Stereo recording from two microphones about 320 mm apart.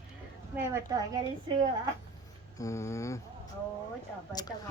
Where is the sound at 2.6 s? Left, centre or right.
Centre.